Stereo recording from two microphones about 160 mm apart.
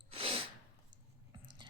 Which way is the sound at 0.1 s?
35° right (ahead or behind).